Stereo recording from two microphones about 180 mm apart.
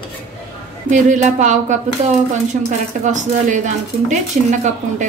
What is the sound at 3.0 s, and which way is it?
A woman's voice, 45° right (ahead or behind).